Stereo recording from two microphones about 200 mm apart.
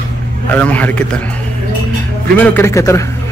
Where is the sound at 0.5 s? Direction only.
10° left (ahead or behind).